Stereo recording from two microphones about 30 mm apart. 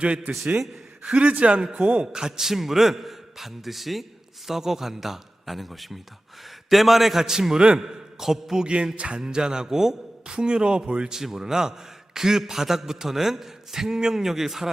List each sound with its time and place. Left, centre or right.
0.3 s a man's voice: right
1.0 s speech: right
2.1 s music: right
2.4 s a man's voice: centre
8.5 s music: right
9.6 s a man's voice: centre
10.3 s speech: right
11.1 s a man's voice: centre